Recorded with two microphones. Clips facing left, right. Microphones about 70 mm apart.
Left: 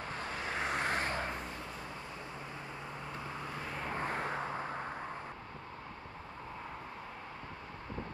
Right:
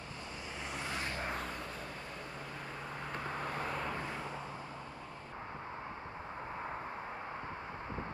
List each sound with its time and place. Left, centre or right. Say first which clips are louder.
0.5 s vehicle: left 7 dB; left
3.9 s vehicle: left 4 dB; left